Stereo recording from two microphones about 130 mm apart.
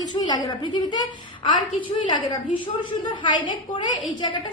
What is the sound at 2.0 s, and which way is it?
A woman's voice, 40° left (ahead or behind).